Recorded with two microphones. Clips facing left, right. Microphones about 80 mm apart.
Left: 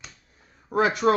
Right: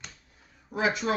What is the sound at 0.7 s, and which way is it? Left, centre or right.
Speech, left.